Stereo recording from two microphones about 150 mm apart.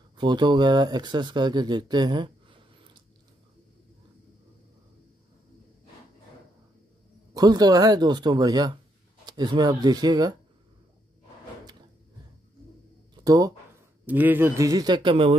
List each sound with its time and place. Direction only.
0.2 s speech: 30° right (ahead or behind)
7.3 s speech: 25° right (ahead or behind)
13.1 s a sound: 25° right (ahead or behind)
14.0 s speech: 10° right (ahead or behind); by 15.3 s 35° right (ahead or behind)